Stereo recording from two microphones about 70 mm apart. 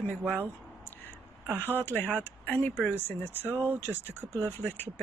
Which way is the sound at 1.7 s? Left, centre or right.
Left.